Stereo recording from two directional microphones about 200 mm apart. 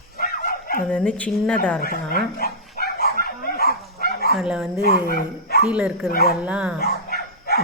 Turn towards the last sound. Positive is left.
turn(degrees=50)  # may be behind; listen again after turning